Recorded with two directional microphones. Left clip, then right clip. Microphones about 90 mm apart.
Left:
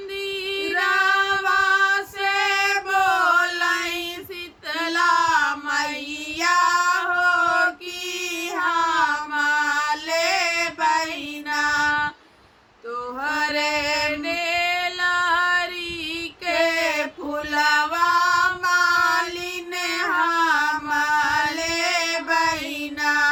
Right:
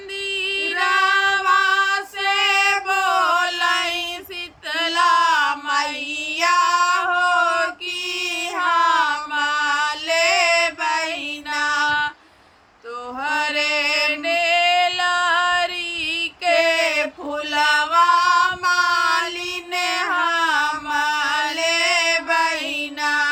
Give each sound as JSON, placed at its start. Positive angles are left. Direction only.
{"t": 0.3, "sound": "female singing", "side_deg": -10}
{"t": 2.8, "sound": "a sound", "side_deg": -10}
{"t": 6.5, "sound": "child singing", "side_deg": -10}
{"t": 6.9, "sound": "a sound", "side_deg": -10}
{"t": 8.5, "sound": "child singing", "side_deg": -5}
{"t": 9.3, "sound": "a sound", "side_deg": -10}
{"t": 11.5, "sound": "music", "side_deg": -10}
{"t": 13.2, "sound": "a sound", "side_deg": -10}
{"t": 18.0, "sound": "female singing", "side_deg": -10}
{"t": 18.6, "sound": "child singing", "side_deg": 30}
{"t": 18.9, "sound": "child singing", "side_deg": -10}
{"t": 20.0, "sound": "music", "side_deg": -10}
{"t": 20.9, "sound": "chant", "side_deg": -10}
{"t": 23.0, "sound": "music", "side_deg": -10}